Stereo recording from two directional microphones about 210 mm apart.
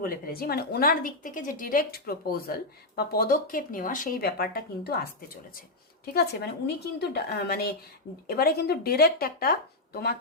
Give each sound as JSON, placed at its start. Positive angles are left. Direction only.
{"t": 0.0, "sound": "a woman's voice", "side_deg": 45}
{"t": 6.1, "sound": "a woman's voice", "side_deg": 50}